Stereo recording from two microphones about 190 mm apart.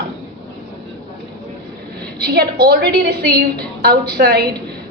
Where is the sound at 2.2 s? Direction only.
55° right (ahead or behind).